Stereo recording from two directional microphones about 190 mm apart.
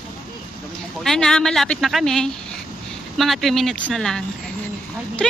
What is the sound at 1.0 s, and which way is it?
A woman's voice, centre (ahead or behind).